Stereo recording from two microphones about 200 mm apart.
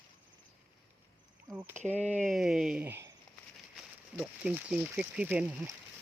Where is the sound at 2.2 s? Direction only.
Centre (ahead or behind).